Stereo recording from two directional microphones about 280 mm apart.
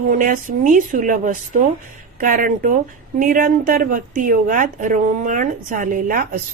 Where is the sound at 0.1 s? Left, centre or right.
Right.